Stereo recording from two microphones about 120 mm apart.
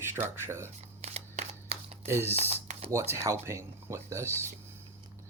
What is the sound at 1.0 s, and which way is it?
Single-lens reflex camera, 70° right (ahead or behind).